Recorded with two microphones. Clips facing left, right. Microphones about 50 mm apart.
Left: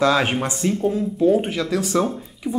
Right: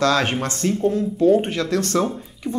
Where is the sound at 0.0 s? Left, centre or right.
Centre.